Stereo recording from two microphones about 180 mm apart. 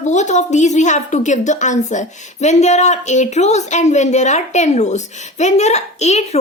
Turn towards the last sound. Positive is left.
turn(degrees=40)  # may be behind; listen again after turning